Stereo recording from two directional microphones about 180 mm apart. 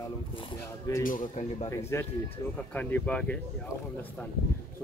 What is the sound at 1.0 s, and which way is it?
Speech, 50° left (ahead or behind).